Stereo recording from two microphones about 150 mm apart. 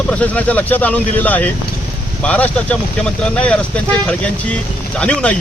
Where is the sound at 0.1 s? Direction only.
10° left (ahead or behind).